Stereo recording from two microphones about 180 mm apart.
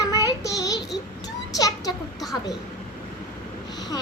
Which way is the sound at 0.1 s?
20° left (ahead or behind).